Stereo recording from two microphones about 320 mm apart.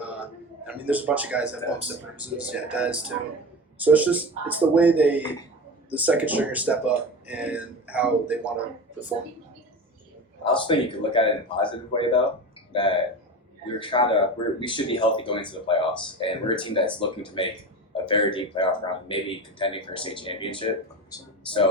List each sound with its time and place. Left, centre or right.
0.7 s speech: centre
10.4 s speech: centre